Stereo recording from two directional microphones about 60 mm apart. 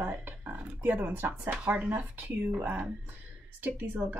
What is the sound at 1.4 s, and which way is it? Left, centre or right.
Speech, centre.